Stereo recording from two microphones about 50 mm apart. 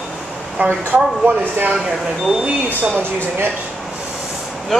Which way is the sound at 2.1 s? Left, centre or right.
Centre.